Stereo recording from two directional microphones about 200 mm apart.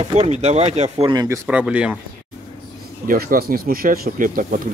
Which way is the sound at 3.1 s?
45° right (ahead or behind).